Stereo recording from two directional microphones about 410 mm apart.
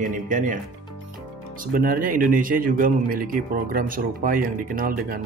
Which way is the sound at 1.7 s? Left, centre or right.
Right.